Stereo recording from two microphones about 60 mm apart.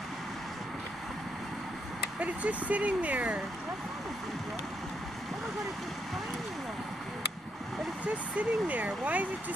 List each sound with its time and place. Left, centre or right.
2.1 s speech: right
8.4 s speech: right